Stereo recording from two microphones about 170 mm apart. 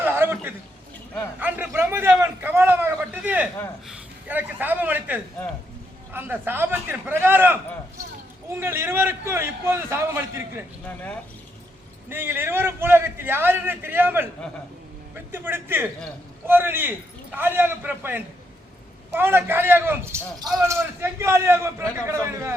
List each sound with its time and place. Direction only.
0.0 s a sound: 15° right (ahead or behind)
3.8 s a man's voice: 10° right (ahead or behind)
10.8 s speech: 10° left (ahead or behind)
12.0 s a man's voice: 10° right (ahead or behind)